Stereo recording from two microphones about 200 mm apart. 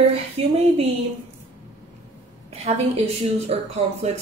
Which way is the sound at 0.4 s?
30° right (ahead or behind).